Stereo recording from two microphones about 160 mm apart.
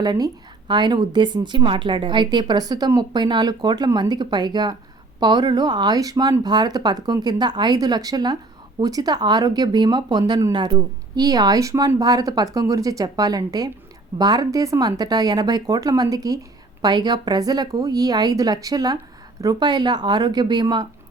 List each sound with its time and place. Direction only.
0.0 s speech: 25° right (ahead or behind)